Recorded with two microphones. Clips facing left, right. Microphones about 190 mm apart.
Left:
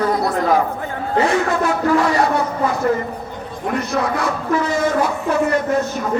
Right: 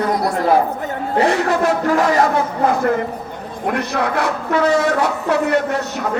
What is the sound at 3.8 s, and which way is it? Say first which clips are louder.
A man's voice: even; 65° right (ahead or behind).